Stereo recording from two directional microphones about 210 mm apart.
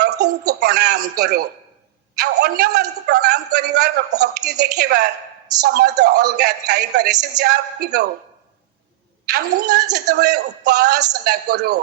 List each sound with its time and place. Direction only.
0.4 s a woman's voice: 50° right (ahead or behind)
9.3 s a woman's voice: 50° right (ahead or behind)